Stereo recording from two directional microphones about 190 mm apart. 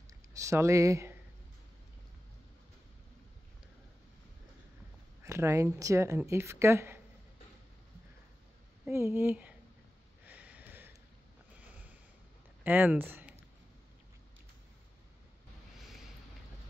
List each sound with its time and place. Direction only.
0.4 s a woman's voice: 15° right (ahead or behind)
5.2 s a woman's voice: 15° right (ahead or behind)
8.8 s a woman's voice: 10° right (ahead or behind)
10.2 s a sound: 10° right (ahead or behind)
12.6 s speech: 10° right (ahead or behind)